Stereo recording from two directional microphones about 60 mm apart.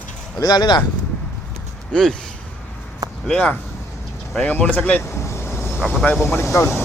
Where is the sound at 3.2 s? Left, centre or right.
Centre.